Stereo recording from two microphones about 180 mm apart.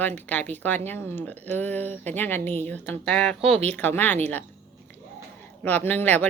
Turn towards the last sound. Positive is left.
turn(degrees=10)  # may be behind; listen again after turning